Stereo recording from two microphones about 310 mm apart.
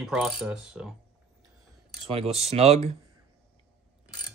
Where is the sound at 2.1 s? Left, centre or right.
Centre.